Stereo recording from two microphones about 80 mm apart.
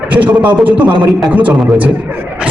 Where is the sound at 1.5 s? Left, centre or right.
Centre.